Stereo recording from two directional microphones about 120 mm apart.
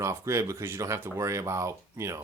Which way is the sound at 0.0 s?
25° right (ahead or behind).